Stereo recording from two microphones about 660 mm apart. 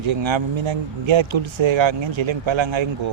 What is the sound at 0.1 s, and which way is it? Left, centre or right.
Speech, right.